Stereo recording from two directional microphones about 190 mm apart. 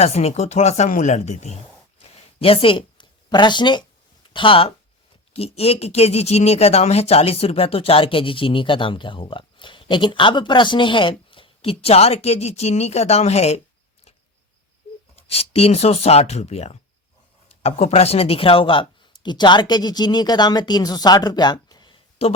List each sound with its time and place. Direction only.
0.0 s speech: 35° left (ahead or behind)
2.0 s a sound: 30° left (ahead or behind)
4.3 s speech: 25° left (ahead or behind)
15.1 s speech: 30° left (ahead or behind)